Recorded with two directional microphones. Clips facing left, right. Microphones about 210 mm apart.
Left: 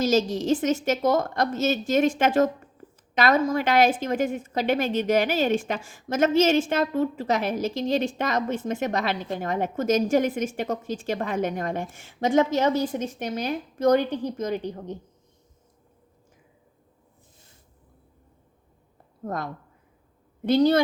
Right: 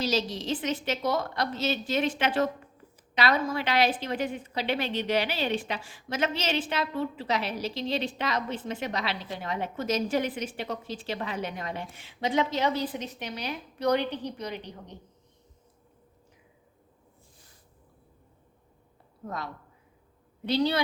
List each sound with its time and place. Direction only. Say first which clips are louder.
0.0 s a woman's voice: left 7 dB; 45° left (ahead or behind)
19.2 s a woman's voice: left 6 dB; 50° left (ahead or behind)